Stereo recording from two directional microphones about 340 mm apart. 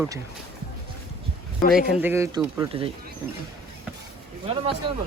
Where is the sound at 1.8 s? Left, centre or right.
Centre.